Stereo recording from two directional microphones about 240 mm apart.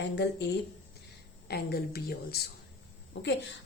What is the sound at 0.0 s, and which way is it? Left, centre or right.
A woman's voice, left.